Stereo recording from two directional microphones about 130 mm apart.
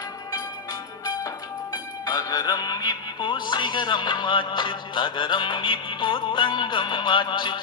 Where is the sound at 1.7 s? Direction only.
30° left (ahead or behind).